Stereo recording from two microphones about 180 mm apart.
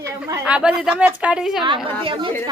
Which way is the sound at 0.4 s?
5° right (ahead or behind).